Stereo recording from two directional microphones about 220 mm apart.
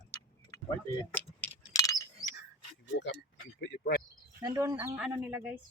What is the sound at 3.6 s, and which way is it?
Speech, 45° left (ahead or behind).